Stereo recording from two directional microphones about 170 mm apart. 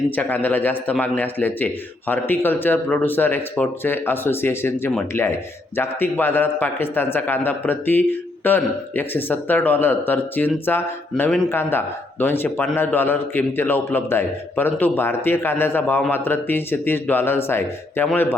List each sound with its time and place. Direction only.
0.2 s a man's voice: 10° left (ahead or behind)